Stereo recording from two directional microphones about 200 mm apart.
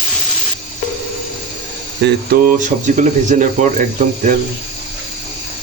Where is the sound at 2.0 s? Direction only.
45° right (ahead or behind).